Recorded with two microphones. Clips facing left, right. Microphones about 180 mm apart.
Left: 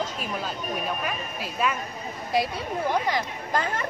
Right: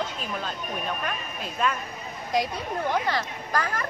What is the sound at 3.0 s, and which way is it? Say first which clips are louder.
Speech: left 1 dB; 20° left (ahead or behind).